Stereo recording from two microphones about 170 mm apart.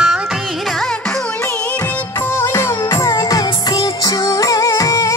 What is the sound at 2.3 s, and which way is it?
Music, 15° left (ahead or behind).